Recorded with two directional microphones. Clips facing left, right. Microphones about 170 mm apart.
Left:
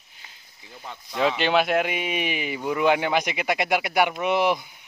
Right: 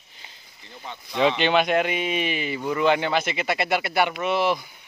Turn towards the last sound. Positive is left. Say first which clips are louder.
# left 1 dB
turn(degrees=15)  # may be behind; listen again after turning